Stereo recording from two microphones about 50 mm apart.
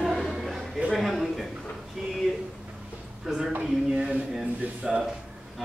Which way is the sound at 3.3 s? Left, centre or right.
Centre.